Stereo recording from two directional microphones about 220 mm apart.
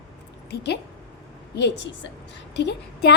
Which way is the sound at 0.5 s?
50° left (ahead or behind).